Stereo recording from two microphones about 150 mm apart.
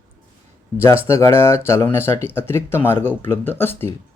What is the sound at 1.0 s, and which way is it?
Speech, 15° left (ahead or behind).